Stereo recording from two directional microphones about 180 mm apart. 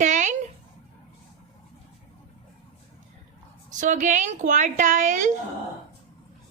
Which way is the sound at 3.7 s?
45° right (ahead or behind).